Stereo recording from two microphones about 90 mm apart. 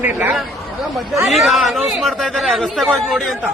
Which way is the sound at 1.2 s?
Centre (ahead or behind).